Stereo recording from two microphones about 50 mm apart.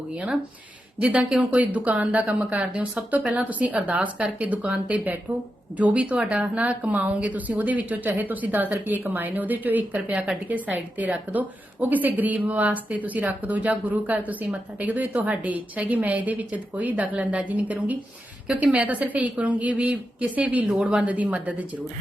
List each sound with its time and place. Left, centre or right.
0.9 s a woman's voice: right